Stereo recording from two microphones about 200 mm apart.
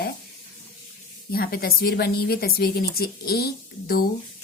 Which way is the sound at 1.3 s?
50° left (ahead or behind).